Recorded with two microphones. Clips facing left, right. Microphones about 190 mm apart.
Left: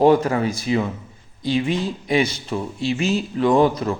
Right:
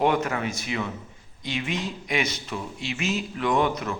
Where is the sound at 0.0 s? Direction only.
35° left (ahead or behind).